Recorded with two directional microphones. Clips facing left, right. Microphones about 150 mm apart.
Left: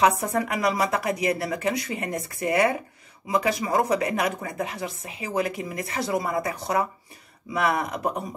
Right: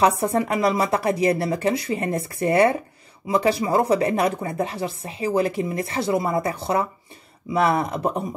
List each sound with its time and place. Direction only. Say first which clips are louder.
0.0 s speech: right 2 dB; 30° right (ahead or behind)